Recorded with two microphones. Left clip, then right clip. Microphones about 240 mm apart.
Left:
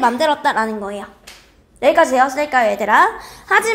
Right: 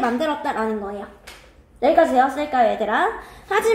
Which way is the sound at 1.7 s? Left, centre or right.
Left.